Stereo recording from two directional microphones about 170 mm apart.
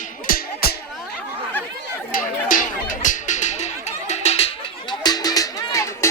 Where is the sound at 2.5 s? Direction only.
50° left (ahead or behind); by 4.9 s 35° left (ahead or behind).